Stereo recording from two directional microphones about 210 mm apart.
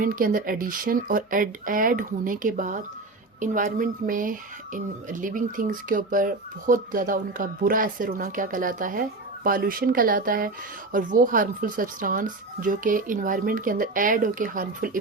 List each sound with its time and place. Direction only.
0.0 s speech: 40° right (ahead or behind)